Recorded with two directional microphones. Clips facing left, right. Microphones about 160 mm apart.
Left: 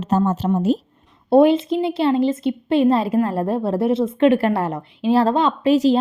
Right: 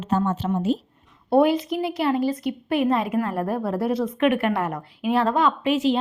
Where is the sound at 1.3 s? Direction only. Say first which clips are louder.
Left 5 dB; 25° left (ahead or behind).